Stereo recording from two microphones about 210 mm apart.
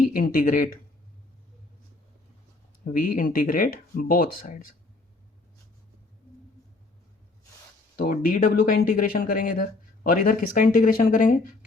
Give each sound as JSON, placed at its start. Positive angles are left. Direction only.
{"t": 0.1, "sound": "speech", "side_deg": 40}
{"t": 2.9, "sound": "speech", "side_deg": 40}
{"t": 7.9, "sound": "speech", "side_deg": 40}